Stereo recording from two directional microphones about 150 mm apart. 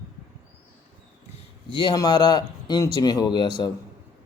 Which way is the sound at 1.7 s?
30° left (ahead or behind).